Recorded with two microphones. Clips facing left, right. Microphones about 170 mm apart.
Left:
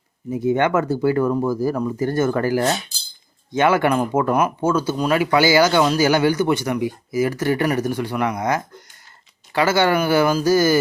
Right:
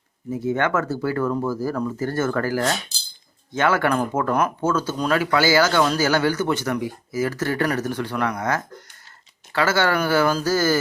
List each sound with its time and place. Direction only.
0.3 s speech: 15° left (ahead or behind)